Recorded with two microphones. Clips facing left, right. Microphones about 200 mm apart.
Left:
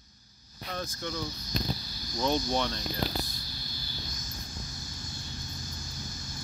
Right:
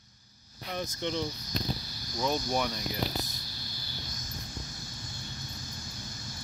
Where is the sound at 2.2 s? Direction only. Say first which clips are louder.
Left 1 dB; 5° right (ahead or behind).